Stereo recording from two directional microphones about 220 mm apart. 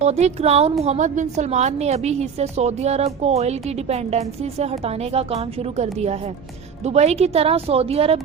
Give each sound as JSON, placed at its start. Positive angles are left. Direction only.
{"t": 0.0, "sound": "a woman's voice", "side_deg": -30}